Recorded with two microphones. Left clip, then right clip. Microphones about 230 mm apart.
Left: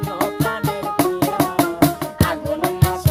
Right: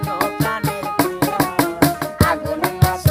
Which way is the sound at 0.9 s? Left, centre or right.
Left.